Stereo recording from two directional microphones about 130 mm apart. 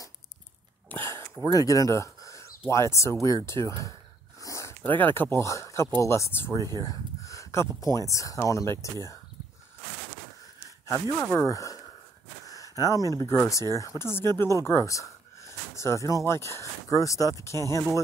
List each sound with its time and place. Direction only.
0.8 s a sound: 15° left (ahead or behind)
2.7 s speech: 20° left (ahead or behind)
10.9 s speech: 25° left (ahead or behind)